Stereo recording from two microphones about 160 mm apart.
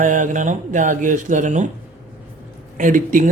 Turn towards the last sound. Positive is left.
turn(degrees=-55)  # may be behind; listen again after turning